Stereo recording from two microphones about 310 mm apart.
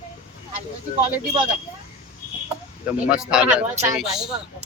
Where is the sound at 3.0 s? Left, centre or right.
Centre.